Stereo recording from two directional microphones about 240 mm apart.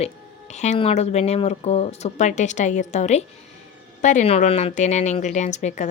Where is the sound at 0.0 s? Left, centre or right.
Left.